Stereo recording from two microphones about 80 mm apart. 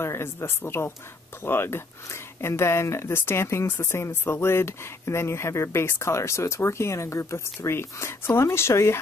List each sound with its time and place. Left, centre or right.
0.0 s speech: left